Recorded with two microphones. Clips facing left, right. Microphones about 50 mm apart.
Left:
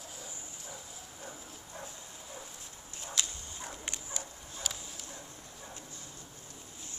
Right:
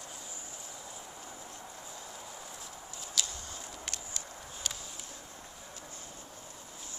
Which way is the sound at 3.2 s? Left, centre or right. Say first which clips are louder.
Even; left.